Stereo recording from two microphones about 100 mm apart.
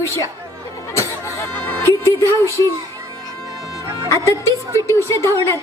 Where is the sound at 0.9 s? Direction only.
30° left (ahead or behind).